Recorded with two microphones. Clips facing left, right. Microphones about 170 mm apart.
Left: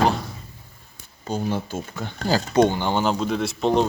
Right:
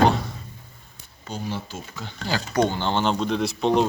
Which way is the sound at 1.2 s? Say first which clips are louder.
Left 6 dB; 50° left (ahead or behind).